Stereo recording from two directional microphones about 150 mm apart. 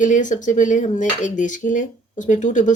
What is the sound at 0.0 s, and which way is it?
Cutlery, 55° left (ahead or behind).